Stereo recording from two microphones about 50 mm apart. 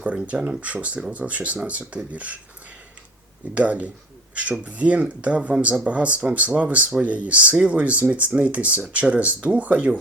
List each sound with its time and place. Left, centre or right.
0.0 s speech: right
3.5 s speech: right